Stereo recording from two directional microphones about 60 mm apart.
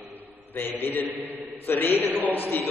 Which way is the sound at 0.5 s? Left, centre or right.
Left.